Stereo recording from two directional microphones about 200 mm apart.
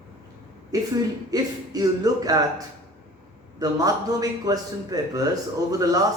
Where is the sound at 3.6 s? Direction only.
20° right (ahead or behind).